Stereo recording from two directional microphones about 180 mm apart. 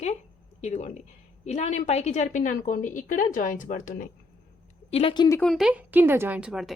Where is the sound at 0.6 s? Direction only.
40° left (ahead or behind).